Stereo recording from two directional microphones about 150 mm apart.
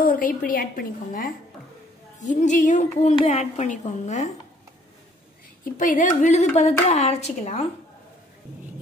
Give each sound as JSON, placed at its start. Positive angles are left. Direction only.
{"t": 0.0, "sound": "a woman's voice", "side_deg": 65}
{"t": 2.1, "sound": "a woman's voice", "side_deg": 55}
{"t": 5.6, "sound": "a woman's voice", "side_deg": 60}